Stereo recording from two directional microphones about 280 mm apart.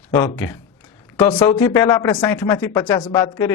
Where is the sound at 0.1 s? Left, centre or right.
Centre.